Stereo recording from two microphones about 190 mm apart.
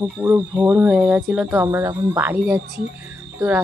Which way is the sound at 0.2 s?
10° right (ahead or behind).